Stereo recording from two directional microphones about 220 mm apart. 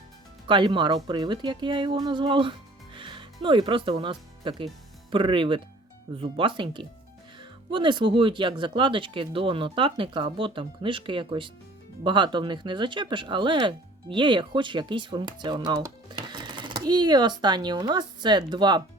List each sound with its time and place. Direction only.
0.4 s speech: 20° right (ahead or behind)